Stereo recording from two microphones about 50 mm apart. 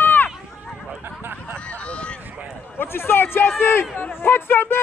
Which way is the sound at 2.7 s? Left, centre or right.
Left.